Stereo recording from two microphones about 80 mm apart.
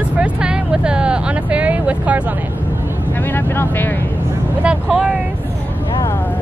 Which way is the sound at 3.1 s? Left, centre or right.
Left.